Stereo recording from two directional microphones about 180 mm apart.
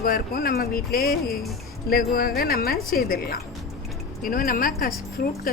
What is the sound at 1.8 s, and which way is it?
A woman's voice, 55° left (ahead or behind).